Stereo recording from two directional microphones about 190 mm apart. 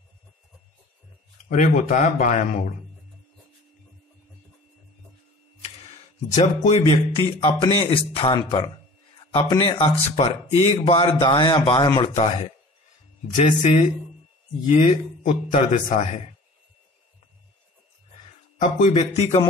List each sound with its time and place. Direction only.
1.5 s a man's voice: 40° left (ahead or behind)
6.3 s a man's voice: 35° left (ahead or behind)
13.4 s a man's voice: 40° left (ahead or behind)
18.6 s a man's voice: 35° left (ahead or behind)